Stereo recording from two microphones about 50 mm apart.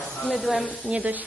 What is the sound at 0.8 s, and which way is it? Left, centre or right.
Music, right.